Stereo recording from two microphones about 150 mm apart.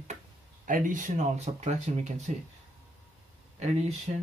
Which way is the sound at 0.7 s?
60° right (ahead or behind).